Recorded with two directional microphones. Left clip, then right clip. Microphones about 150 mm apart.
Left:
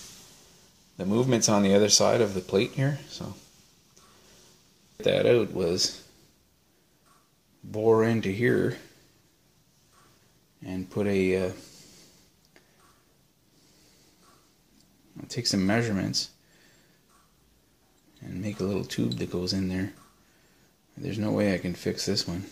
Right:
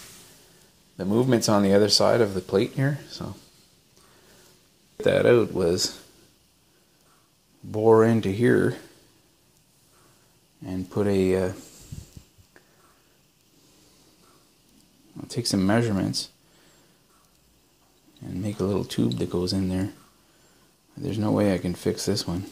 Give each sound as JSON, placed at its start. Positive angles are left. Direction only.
{"t": 0.9, "sound": "speech", "side_deg": -20}
{"t": 5.0, "sound": "speech", "side_deg": -30}
{"t": 7.7, "sound": "speech", "side_deg": -30}
{"t": 10.6, "sound": "speech", "side_deg": -30}
{"t": 15.1, "sound": "speech", "side_deg": -30}
{"t": 18.2, "sound": "speech", "side_deg": -25}
{"t": 21.0, "sound": "speech", "side_deg": -25}